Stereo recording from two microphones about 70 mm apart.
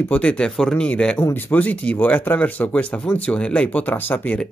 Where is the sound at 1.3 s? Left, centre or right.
Left.